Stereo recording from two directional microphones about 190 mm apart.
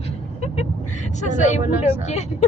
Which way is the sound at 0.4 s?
40° left (ahead or behind).